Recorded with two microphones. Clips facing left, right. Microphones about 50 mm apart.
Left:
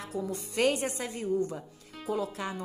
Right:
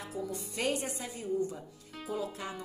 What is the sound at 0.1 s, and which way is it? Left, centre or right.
Speech, left.